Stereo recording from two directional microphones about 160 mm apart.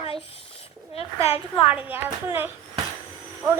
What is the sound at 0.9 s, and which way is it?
Speech, 40° left (ahead or behind).